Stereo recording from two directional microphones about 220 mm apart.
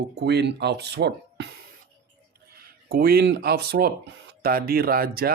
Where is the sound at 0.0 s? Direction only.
50° right (ahead or behind).